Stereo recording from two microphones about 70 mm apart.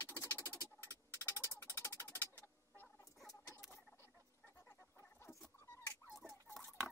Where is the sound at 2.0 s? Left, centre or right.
Left.